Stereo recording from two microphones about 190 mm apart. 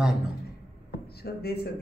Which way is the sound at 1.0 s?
55° left (ahead or behind).